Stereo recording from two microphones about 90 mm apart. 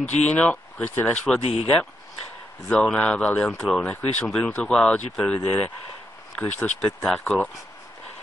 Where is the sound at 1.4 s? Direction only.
90° left.